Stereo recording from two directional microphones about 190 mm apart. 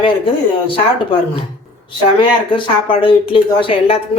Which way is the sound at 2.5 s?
25° left (ahead or behind).